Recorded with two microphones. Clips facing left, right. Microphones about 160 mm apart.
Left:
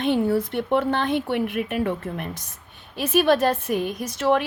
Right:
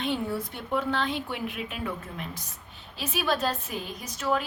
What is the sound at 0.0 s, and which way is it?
A woman's voice, 65° left (ahead or behind).